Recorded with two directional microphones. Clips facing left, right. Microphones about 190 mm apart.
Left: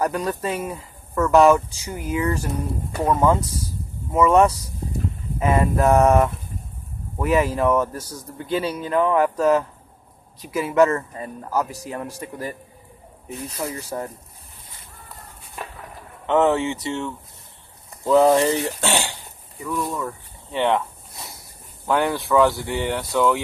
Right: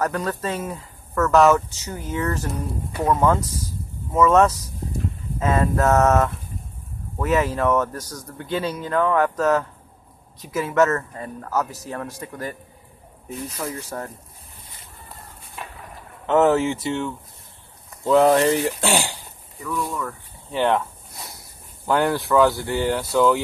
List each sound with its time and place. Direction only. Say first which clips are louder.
0.0 s speech: left 1 dB; 10° left (ahead or behind)
13.6 s speech: left 2 dB; 5° left (ahead or behind)
16.3 s speech: right 1 dB; centre (ahead or behind)
18.9 s speech: right 1 dB; 10° right (ahead or behind)
19.6 s speech: left 1 dB; 20° left (ahead or behind)
20.5 s speech: even; centre (ahead or behind)
21.8 s speech: right 1 dB; centre (ahead or behind)